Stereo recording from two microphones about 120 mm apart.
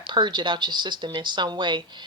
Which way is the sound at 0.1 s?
40° right (ahead or behind).